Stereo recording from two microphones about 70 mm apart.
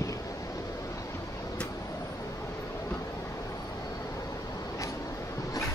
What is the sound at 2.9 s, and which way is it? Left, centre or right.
Train, left.